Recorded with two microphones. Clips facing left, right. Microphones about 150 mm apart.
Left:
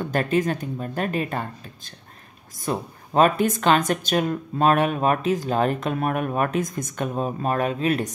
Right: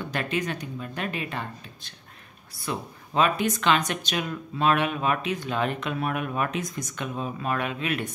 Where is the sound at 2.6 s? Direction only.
45° left (ahead or behind).